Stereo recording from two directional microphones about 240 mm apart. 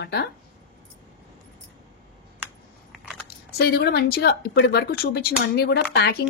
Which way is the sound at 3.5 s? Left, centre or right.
Left.